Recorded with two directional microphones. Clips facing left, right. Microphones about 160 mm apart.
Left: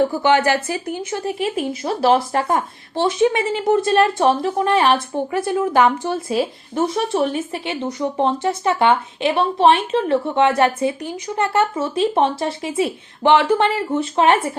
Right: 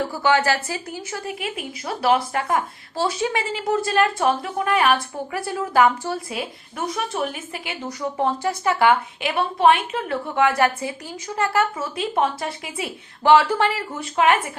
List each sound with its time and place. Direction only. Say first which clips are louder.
0.2 s speech: left 3 dB; 20° left (ahead or behind)